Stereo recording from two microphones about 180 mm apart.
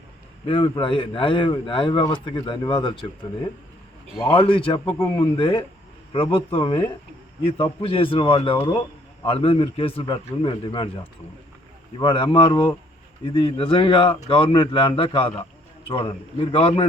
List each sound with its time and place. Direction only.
0.4 s speech: 30° left (ahead or behind)
4.3 s speech: 30° left (ahead or behind)